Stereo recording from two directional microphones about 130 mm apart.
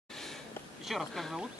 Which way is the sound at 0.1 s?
5° left (ahead or behind).